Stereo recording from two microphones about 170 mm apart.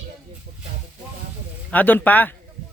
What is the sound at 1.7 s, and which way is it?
Speech, 10° left (ahead or behind).